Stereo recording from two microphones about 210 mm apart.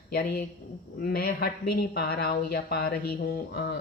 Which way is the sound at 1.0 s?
45° left (ahead or behind).